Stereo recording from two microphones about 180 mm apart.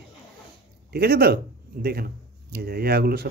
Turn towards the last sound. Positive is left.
turn(degrees=-60)  # may be behind; listen again after turning